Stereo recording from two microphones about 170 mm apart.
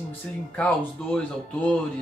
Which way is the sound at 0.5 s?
5° left (ahead or behind).